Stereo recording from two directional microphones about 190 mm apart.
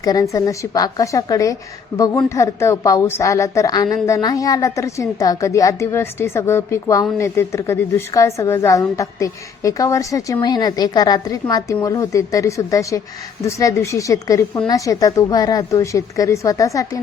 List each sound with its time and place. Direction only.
0.0 s a woman's voice: 20° left (ahead or behind)